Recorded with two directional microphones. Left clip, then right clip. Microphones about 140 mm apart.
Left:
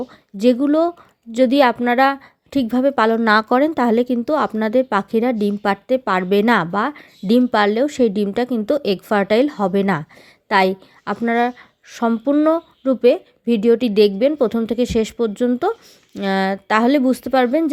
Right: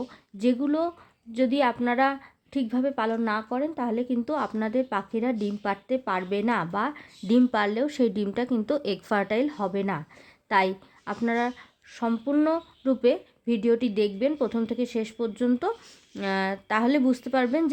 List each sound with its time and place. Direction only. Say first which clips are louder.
0.0 s speech: left 10 dB; 40° left (ahead or behind)
3.2 s speech: left 13 dB; 70° left (ahead or behind); by 6.7 s 55° left (ahead or behind)
6.7 s a woman's voice: left 8 dB; 35° left (ahead or behind)